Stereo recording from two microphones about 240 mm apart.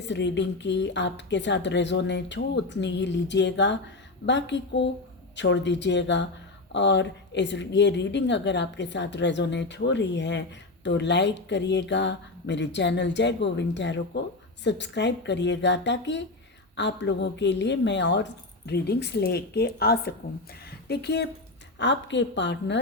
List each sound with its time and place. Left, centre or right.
0.0 s a woman's voice: left
20.7 s a sound: left
21.8 s a woman's voice: left